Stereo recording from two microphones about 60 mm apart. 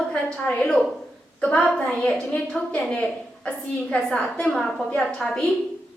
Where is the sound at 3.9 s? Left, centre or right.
Centre.